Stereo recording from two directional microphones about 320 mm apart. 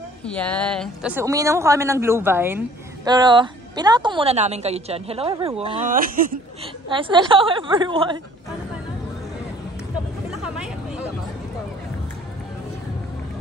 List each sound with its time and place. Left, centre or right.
0.2 s a woman's voice: centre; by 6.4 s right
6.9 s a woman's voice: centre
10.3 s vehicle: centre